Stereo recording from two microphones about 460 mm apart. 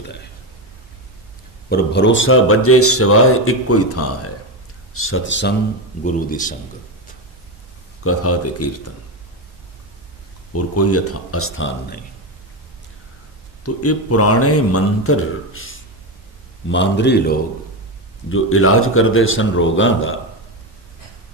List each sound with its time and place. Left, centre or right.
1.7 s speech: left
8.0 s speech: left
10.5 s speech: left
13.8 s speech: left